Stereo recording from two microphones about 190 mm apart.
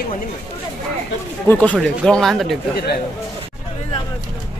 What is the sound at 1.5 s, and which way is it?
Speech, 10° left (ahead or behind).